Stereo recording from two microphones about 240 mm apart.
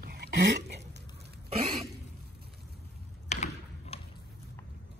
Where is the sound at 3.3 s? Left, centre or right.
Left.